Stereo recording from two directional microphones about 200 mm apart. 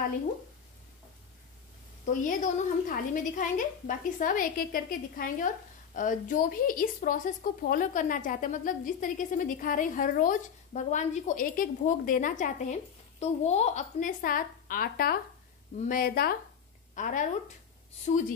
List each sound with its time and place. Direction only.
2.0 s a woman's voice: 40° left (ahead or behind)